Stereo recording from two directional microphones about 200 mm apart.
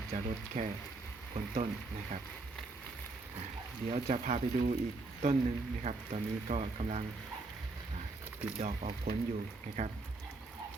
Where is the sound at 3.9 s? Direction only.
35° right (ahead or behind).